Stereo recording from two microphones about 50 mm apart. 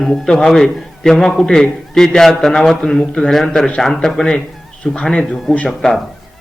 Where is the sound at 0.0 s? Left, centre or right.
Centre.